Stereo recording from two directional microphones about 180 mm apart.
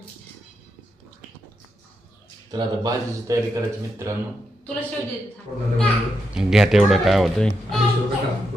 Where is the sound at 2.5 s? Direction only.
20° right (ahead or behind).